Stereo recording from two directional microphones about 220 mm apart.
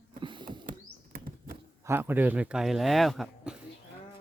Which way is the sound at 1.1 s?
40° right (ahead or behind).